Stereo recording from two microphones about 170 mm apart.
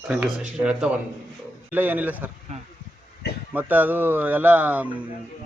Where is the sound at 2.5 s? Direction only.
40° right (ahead or behind).